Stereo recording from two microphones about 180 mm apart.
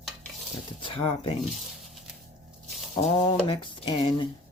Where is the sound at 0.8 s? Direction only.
30° left (ahead or behind).